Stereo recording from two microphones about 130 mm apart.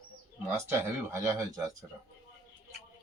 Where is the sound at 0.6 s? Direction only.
20° right (ahead or behind).